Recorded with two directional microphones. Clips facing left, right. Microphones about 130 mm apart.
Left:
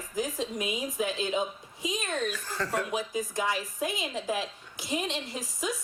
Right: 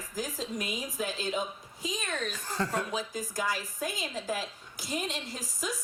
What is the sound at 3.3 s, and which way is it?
A woman's voice, 25° left (ahead or behind).